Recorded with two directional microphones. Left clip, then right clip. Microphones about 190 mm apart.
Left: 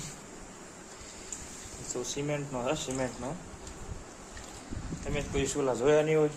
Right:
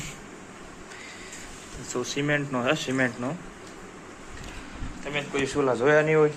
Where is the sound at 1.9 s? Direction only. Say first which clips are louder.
Right 7 dB; 5° right (ahead or behind).